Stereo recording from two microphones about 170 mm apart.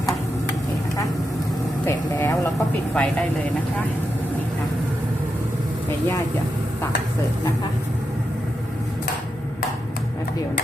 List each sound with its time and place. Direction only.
1.8 s vehicle: 15° left (ahead or behind)
2.9 s speech: 5° left (ahead or behind)